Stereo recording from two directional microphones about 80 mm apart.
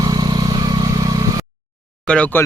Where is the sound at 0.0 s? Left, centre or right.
Right.